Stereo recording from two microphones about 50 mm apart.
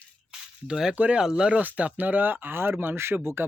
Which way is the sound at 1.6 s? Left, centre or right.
Right.